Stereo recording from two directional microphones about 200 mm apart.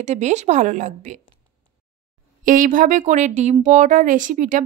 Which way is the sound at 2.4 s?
40° right (ahead or behind).